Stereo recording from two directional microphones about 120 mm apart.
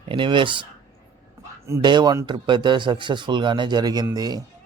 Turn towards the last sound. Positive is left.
turn(degrees=-35)  # may be behind; listen again after turning